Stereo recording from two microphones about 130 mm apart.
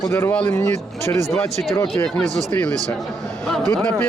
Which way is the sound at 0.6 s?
60° right (ahead or behind).